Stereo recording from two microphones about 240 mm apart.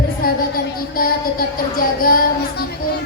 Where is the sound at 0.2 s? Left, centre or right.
Left.